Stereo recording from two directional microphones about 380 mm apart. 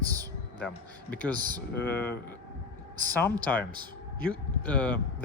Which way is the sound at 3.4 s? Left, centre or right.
Centre.